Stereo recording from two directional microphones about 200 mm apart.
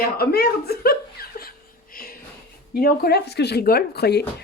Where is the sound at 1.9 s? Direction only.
45° left (ahead or behind).